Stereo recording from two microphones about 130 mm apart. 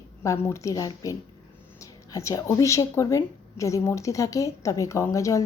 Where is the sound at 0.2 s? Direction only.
20° left (ahead or behind).